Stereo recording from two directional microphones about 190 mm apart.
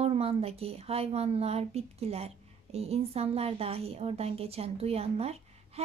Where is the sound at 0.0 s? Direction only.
30° right (ahead or behind).